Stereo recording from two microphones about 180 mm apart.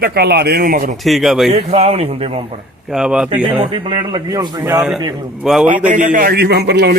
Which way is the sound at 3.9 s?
25° right (ahead or behind).